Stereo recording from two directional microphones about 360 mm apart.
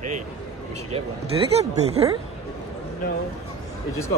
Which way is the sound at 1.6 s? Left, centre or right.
Centre.